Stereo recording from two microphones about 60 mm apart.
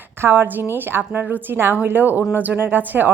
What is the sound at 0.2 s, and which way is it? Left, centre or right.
A woman's voice, right.